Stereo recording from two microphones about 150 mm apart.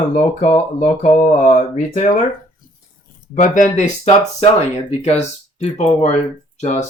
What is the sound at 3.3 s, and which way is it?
Speech, 60° left (ahead or behind).